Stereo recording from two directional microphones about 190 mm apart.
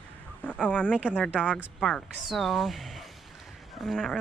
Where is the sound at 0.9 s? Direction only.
5° right (ahead or behind).